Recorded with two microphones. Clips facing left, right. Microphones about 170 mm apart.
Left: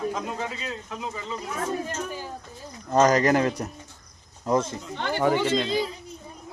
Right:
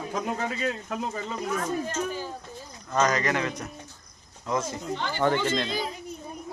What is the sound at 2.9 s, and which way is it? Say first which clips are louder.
Speech: left 6 dB; 35° left (ahead or behind).